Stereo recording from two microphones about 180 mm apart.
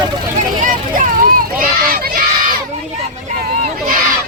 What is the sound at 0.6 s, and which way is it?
Speech, 45° right (ahead or behind).